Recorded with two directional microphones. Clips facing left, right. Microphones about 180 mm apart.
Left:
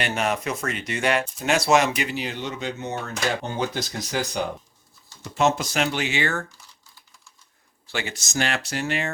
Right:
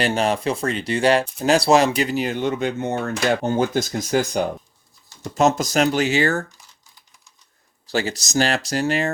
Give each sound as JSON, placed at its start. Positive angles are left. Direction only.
{"t": 0.0, "sound": "speech", "side_deg": -30}
{"t": 7.9, "sound": "speech", "side_deg": -40}